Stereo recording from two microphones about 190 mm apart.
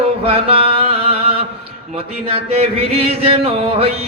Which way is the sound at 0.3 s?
30° right (ahead or behind).